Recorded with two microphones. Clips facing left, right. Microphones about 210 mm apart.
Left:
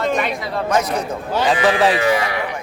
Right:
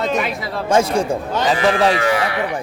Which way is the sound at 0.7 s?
30° right (ahead or behind).